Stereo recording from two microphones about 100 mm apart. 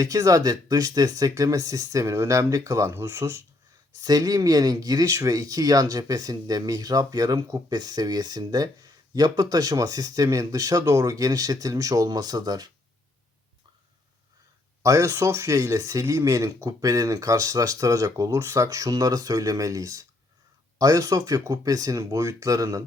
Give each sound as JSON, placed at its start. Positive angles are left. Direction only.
{"t": 0.0, "sound": "speech", "side_deg": -35}
{"t": 4.0, "sound": "speech", "side_deg": -40}
{"t": 14.8, "sound": "speech", "side_deg": -35}